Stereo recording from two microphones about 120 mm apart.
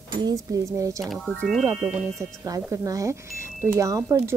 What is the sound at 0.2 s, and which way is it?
Speech, 30° right (ahead or behind).